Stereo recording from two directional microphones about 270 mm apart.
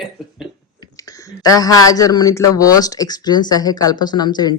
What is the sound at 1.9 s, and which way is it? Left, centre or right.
Speech, centre.